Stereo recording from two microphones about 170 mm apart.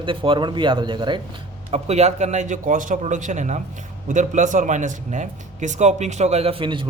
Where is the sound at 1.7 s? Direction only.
40° right (ahead or behind).